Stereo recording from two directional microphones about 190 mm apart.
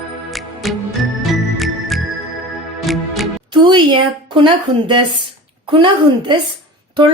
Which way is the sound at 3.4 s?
25° right (ahead or behind).